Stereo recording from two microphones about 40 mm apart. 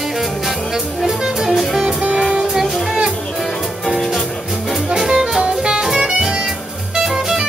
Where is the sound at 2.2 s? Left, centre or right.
Centre.